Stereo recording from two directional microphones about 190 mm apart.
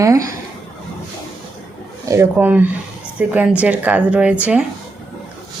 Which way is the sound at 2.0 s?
15° right (ahead or behind).